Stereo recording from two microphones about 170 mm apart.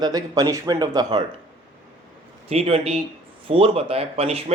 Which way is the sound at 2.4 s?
35° right (ahead or behind).